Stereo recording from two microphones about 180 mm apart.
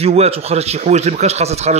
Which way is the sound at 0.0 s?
35° right (ahead or behind).